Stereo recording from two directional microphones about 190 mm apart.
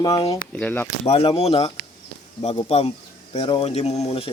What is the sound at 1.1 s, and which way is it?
Speech, 30° left (ahead or behind).